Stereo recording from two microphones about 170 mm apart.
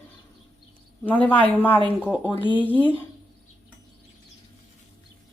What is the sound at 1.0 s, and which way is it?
Speech, 10° left (ahead or behind).